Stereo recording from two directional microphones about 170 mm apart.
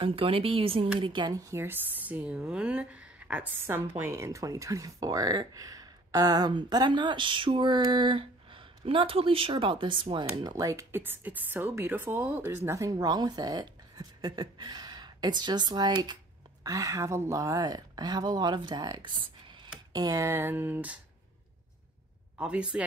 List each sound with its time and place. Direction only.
0.0 s speech: 30° right (ahead or behind)
10.6 s speech: 20° right (ahead or behind)
22.4 s speech: 5° right (ahead or behind)